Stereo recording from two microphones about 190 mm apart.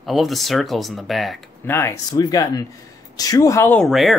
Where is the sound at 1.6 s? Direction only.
15° left (ahead or behind).